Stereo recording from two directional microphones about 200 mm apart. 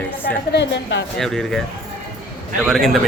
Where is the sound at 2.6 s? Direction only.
Centre (ahead or behind).